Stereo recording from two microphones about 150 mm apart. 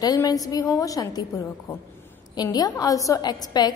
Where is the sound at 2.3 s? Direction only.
25° left (ahead or behind).